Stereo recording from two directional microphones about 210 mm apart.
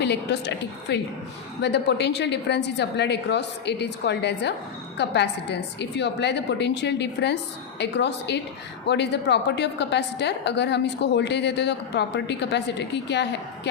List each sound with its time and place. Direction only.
0.0 s a woman's voice: 55° left (ahead or behind)